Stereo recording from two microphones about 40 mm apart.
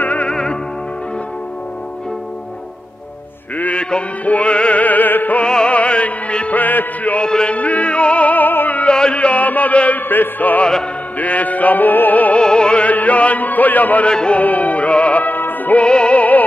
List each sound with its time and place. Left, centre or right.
0.0 s music: left
4.2 s music: left
4.8 s music: left
5.7 s music: left
7.2 s music: left
7.5 s music: left
8.8 s chant: left
9.2 s music: left
12.4 s music: left
12.8 s music: left
14.0 s music: left
14.4 s music: left
15.8 s music: left
16.2 s music: left